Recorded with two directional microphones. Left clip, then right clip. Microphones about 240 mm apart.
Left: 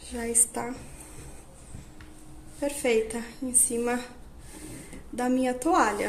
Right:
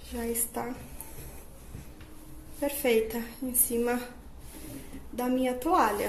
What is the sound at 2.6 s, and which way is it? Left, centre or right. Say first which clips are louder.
Speech: left 1 dB; centre.